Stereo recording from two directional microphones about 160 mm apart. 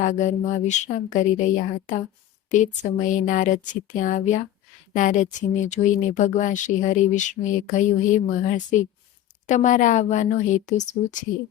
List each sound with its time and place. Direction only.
0.0 s speech: 50° left (ahead or behind)